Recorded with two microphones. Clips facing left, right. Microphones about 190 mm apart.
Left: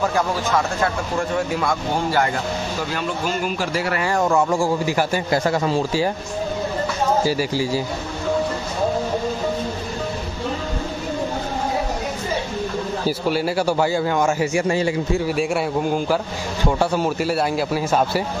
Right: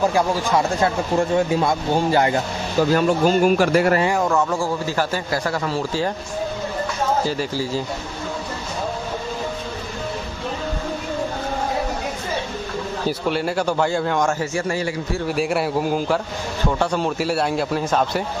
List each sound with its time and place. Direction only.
1.1 s speech: 25° right (ahead or behind)
2.8 s speech: 40° right (ahead or behind)
3.5 s speech: 55° right (ahead or behind)
4.2 s a man's voice: 10° left (ahead or behind)
7.2 s a man's voice: 10° left (ahead or behind)
13.3 s a man's voice: 5° left (ahead or behind)
14.4 s a man's voice: 15° left (ahead or behind)
15.2 s a man's voice: centre (ahead or behind)